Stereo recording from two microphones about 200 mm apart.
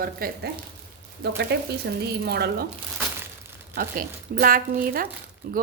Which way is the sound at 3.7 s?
45° right (ahead or behind).